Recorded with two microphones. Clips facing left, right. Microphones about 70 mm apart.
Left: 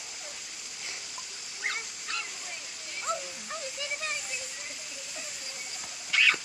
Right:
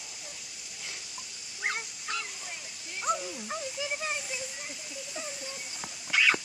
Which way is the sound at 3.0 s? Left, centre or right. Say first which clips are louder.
Right 3 dB; centre.